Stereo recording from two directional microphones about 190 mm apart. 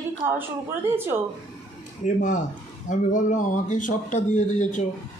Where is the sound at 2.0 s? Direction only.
35° left (ahead or behind).